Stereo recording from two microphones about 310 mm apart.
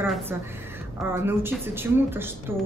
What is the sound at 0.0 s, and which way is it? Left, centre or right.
A woman's voice, centre.